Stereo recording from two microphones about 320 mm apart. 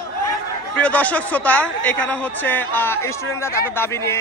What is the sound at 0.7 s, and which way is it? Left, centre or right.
A man's voice, centre.